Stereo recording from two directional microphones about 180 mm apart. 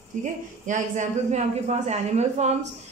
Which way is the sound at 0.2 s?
45° right (ahead or behind).